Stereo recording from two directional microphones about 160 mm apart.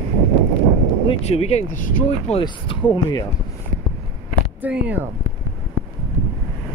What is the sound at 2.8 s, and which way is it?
Speech, 10° left (ahead or behind).